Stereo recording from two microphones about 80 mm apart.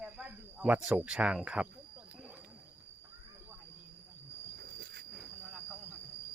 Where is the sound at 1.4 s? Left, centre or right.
Centre.